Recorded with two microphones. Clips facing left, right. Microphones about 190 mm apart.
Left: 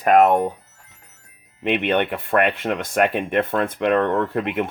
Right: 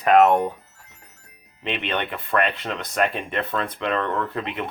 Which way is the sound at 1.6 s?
55° left (ahead or behind).